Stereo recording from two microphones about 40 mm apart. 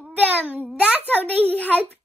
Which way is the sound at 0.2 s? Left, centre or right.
Right.